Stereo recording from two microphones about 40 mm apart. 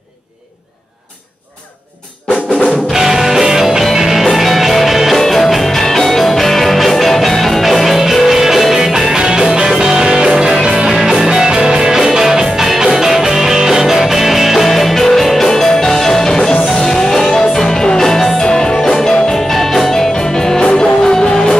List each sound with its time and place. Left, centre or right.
2.9 s music: centre